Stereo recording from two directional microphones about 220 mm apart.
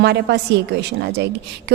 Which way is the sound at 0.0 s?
50° right (ahead or behind).